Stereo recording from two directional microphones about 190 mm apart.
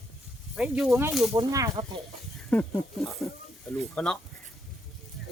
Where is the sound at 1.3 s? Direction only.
20° right (ahead or behind).